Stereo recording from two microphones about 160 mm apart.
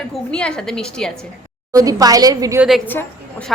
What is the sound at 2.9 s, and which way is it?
Speech, 10° left (ahead or behind).